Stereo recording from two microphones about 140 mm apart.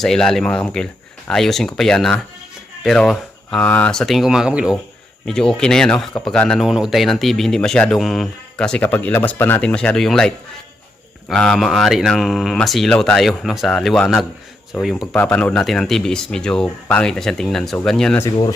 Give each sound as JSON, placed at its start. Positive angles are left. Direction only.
{"t": 0.0, "sound": "speech", "side_deg": 5}
{"t": 15.1, "sound": "speech", "side_deg": 10}